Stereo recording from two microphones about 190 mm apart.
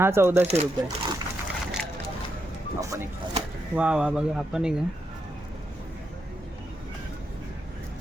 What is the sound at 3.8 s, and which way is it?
Speech, 5° right (ahead or behind).